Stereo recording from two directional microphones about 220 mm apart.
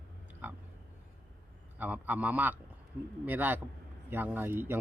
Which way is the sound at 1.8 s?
5° right (ahead or behind).